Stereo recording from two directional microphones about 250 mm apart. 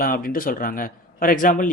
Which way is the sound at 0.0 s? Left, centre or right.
Left.